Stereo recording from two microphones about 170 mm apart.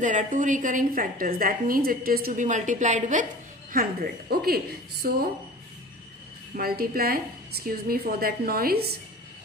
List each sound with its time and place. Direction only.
0.0 s a woman's voice: 50° right (ahead or behind)
3.7 s a woman's voice: 60° right (ahead or behind)
6.5 s a woman's voice: 60° right (ahead or behind)